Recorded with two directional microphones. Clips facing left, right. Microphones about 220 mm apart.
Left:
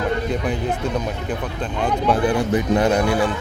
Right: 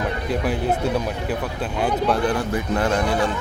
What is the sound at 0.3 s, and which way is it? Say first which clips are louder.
Speech: right 1 dB; 5° right (ahead or behind).